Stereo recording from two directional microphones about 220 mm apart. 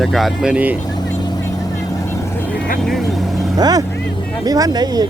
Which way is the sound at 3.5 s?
15° right (ahead or behind).